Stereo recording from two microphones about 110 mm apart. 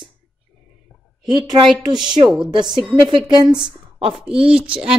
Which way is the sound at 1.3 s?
45° right (ahead or behind).